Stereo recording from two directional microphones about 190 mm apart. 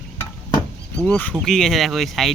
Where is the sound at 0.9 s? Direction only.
5° left (ahead or behind).